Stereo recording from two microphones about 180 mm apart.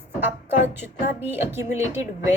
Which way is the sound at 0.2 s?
10° right (ahead or behind).